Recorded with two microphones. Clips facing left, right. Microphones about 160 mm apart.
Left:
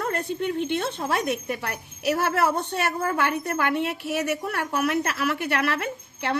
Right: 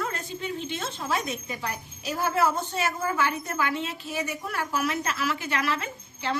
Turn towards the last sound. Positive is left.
turn(degrees=65)  # may be behind; listen again after turning